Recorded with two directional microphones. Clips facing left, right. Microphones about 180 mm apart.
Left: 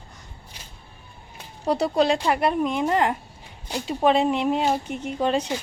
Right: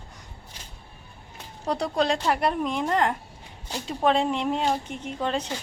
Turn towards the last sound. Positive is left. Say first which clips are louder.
# left 5 dB
turn(degrees=10)  # may be behind; listen again after turning